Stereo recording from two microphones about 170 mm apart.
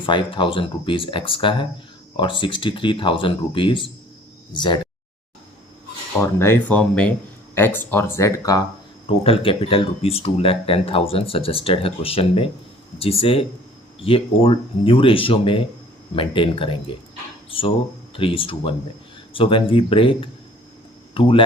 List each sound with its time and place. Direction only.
0.0 s speech: 30° left (ahead or behind)
6.4 s speech: 10° left (ahead or behind)
9.0 s speech: 35° left (ahead or behind)